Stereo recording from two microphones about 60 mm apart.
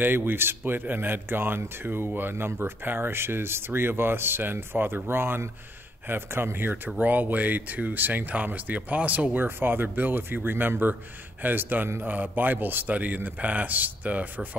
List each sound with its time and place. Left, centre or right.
0.0 s a man's voice: right
9.4 s a man's voice: right